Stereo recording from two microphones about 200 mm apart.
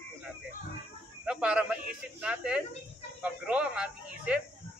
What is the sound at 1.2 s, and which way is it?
Speech, 5° right (ahead or behind).